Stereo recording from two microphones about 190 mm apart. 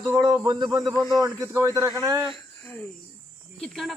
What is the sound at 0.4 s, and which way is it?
A man's voice, 20° right (ahead or behind).